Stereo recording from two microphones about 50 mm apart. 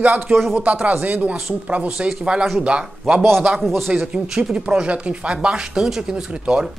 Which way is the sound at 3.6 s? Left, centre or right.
Centre.